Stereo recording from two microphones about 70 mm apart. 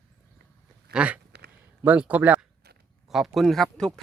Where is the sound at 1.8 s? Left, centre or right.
Right.